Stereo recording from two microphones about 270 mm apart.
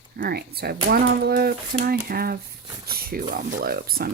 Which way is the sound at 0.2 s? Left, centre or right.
Right.